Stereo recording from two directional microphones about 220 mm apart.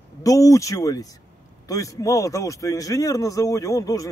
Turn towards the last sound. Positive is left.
turn(degrees=15)  # may be behind; listen again after turning